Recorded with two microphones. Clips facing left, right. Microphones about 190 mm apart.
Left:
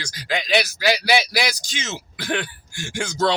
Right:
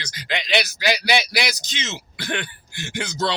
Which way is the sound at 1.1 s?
10° left (ahead or behind).